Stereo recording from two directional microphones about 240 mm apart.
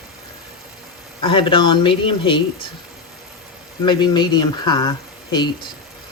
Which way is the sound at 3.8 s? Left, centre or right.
Centre.